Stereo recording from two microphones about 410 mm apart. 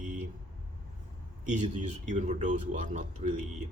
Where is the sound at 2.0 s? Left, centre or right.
Centre.